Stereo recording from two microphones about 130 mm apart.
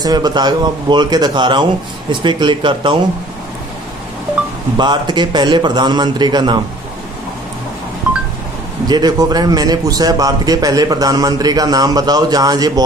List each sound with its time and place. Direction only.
0.0 s a man's voice: 30° right (ahead or behind)
4.7 s a man's voice: 35° right (ahead or behind)
8.1 s a sound: 10° right (ahead or behind)
8.8 s a man's voice: 30° right (ahead or behind)